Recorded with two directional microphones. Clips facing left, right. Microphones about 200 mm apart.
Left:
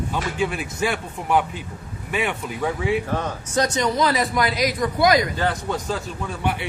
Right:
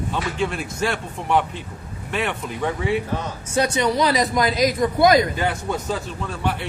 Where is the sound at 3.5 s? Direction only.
10° right (ahead or behind).